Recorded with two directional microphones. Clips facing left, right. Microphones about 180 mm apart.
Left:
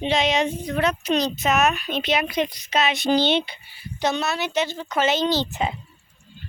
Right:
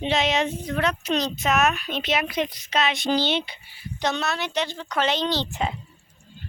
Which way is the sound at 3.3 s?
25° left (ahead or behind).